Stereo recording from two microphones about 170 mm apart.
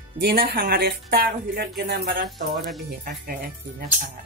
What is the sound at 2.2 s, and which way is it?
Speech, centre (ahead or behind).